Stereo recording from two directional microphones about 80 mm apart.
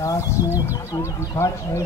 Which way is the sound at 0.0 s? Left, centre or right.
Left.